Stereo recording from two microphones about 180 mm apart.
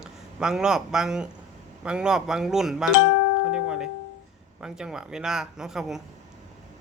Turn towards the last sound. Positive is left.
turn(degrees=0)  # may be behind; listen again after turning